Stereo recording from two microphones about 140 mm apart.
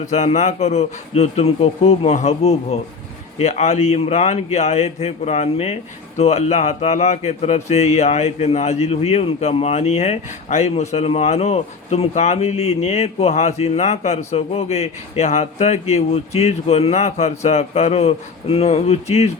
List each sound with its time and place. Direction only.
0.0 s speech: 55° left (ahead or behind)